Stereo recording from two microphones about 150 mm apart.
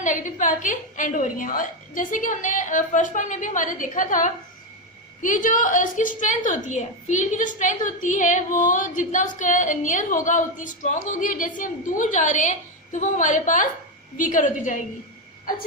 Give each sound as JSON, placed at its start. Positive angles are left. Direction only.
{"t": 0.0, "sound": "a woman's voice", "side_deg": 55}